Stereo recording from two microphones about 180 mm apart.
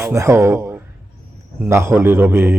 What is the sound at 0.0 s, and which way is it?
A man's voice, 15° right (ahead or behind).